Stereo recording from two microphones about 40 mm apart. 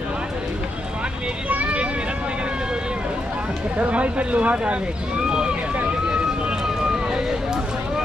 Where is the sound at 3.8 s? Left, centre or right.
Right.